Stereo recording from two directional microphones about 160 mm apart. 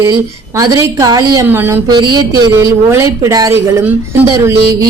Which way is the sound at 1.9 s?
25° right (ahead or behind).